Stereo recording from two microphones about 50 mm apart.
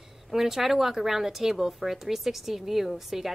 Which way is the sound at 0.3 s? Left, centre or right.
Centre.